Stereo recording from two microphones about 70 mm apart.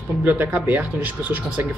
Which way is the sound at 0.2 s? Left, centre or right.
Right.